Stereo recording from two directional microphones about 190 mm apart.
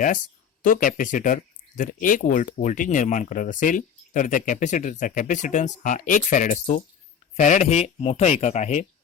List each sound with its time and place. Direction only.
0.6 s speech: 45° left (ahead or behind)